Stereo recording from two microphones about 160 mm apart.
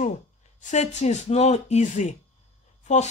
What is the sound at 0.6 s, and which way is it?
Speech, 50° left (ahead or behind).